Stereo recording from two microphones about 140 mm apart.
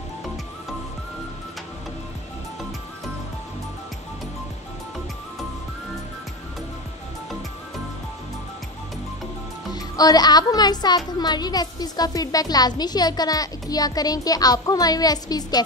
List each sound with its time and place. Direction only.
9.8 s speech: 25° left (ahead or behind)